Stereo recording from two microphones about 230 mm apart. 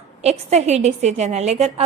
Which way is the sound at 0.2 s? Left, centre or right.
Right.